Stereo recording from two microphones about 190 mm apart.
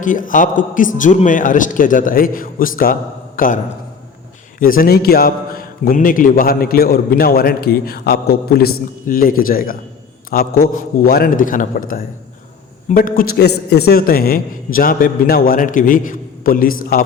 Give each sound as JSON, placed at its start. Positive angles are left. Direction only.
{"t": 0.0, "sound": "a man's voice", "side_deg": 45}
{"t": 4.6, "sound": "a man's voice", "side_deg": 50}
{"t": 12.9, "sound": "a man's voice", "side_deg": 45}